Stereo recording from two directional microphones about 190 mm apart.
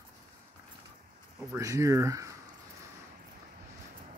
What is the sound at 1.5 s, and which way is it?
Speech, 15° right (ahead or behind).